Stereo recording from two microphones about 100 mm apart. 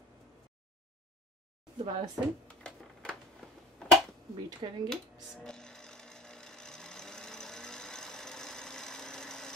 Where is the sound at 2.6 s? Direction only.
10° left (ahead or behind).